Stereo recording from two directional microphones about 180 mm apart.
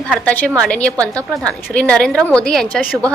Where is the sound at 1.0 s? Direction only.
20° right (ahead or behind).